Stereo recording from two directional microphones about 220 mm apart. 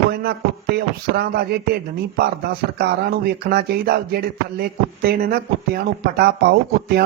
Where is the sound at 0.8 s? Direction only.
45° right (ahead or behind).